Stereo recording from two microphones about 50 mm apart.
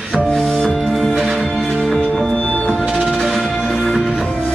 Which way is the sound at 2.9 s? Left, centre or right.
Centre.